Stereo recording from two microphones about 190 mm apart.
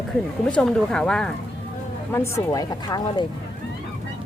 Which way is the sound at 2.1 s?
15° left (ahead or behind).